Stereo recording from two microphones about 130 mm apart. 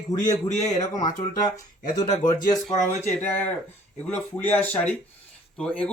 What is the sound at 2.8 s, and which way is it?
Speech, 15° left (ahead or behind).